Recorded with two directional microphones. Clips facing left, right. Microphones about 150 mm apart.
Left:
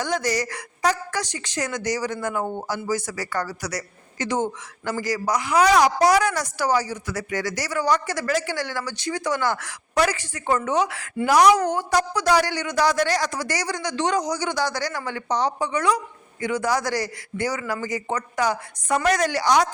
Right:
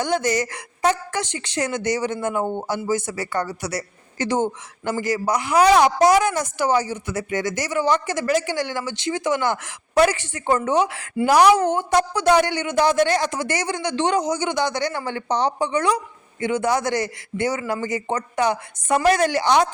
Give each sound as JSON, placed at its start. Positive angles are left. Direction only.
{"t": 0.0, "sound": "a woman's voice", "side_deg": -25}